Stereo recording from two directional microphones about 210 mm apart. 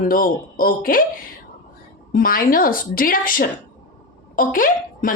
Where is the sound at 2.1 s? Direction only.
40° left (ahead or behind).